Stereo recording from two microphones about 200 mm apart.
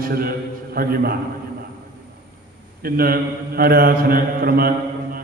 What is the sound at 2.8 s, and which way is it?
Mantra, 50° right (ahead or behind).